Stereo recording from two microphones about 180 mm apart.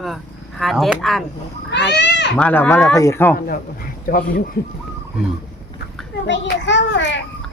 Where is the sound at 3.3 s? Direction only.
55° left (ahead or behind).